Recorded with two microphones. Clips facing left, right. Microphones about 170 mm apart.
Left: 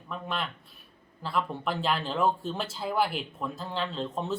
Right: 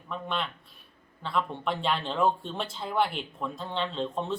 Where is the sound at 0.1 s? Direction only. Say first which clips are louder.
Right 1 dB; centre (ahead or behind).